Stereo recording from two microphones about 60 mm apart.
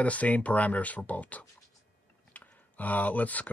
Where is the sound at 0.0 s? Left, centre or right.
Left.